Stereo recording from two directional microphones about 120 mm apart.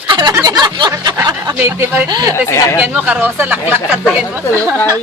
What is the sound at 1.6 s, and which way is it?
Speech, 15° right (ahead or behind).